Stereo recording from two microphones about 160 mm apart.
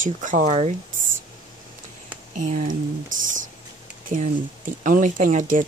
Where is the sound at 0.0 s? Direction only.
55° right (ahead or behind).